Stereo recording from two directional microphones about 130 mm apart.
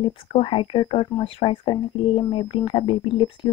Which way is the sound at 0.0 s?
45° left (ahead or behind).